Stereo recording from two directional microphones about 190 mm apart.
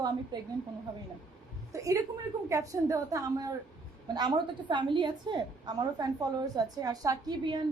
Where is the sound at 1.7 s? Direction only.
15° right (ahead or behind).